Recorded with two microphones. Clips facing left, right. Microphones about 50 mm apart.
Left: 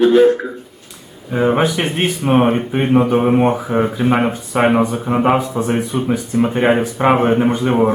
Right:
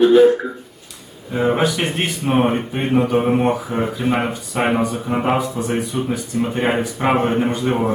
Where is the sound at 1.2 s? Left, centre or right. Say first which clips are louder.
Left 3 dB; centre.